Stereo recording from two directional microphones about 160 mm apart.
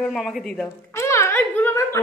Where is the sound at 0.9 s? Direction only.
20° left (ahead or behind).